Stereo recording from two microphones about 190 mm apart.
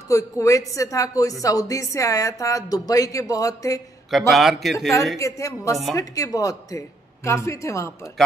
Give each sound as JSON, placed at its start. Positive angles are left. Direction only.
{"t": 0.1, "sound": "a woman's voice", "side_deg": 15}
{"t": 4.1, "sound": "a man's voice", "side_deg": 0}
{"t": 5.2, "sound": "a woman's voice", "side_deg": 15}